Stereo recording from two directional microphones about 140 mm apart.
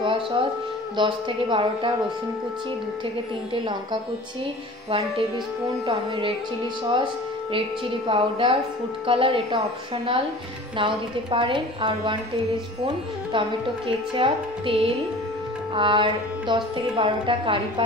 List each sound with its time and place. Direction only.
0.0 s a sound: 35° right (ahead or behind)
0.9 s speech: 35° right (ahead or behind)
5.9 s speech: 40° right (ahead or behind)
8.1 s speech: 40° right (ahead or behind)
10.8 s speech: 35° right (ahead or behind)